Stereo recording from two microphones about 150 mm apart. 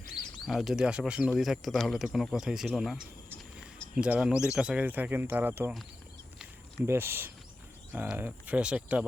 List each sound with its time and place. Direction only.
0.4 s speech: centre (ahead or behind)
6.8 s speech: 15° right (ahead or behind)